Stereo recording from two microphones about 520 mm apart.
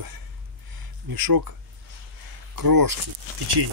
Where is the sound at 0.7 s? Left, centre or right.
Right.